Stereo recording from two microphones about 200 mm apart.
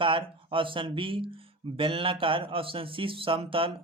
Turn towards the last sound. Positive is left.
turn(degrees=-25)  # may be behind; listen again after turning